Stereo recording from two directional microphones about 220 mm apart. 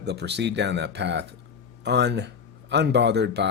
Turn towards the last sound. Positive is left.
turn(degrees=-50)  # may be behind; listen again after turning